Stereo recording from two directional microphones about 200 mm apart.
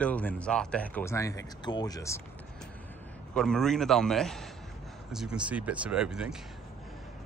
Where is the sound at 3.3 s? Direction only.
5° left (ahead or behind).